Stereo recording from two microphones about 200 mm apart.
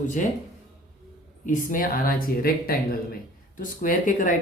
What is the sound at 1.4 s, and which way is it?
Speech, 40° left (ahead or behind).